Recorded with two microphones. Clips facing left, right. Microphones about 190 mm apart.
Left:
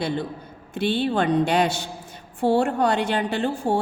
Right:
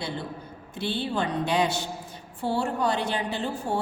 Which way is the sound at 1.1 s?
65° left (ahead or behind).